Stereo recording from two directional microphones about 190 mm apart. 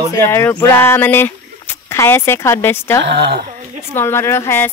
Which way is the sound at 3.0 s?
65° right (ahead or behind).